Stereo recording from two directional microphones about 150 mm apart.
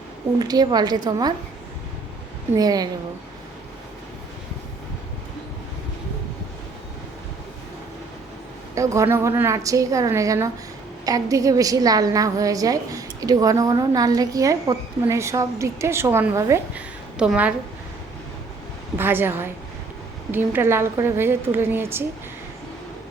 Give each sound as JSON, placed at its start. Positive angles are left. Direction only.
{"t": 0.3, "sound": "a woman's voice", "side_deg": -25}
{"t": 2.6, "sound": "a woman's voice", "side_deg": -25}
{"t": 8.7, "sound": "a woman's voice", "side_deg": -20}
{"t": 16.7, "sound": "a sound", "side_deg": -10}
{"t": 18.9, "sound": "a woman's voice", "side_deg": -15}